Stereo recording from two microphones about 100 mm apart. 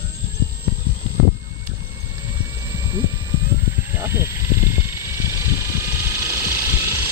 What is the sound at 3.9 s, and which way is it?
Vehicle, 25° right (ahead or behind).